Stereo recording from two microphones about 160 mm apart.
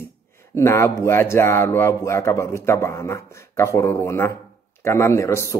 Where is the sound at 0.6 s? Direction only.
20° left (ahead or behind).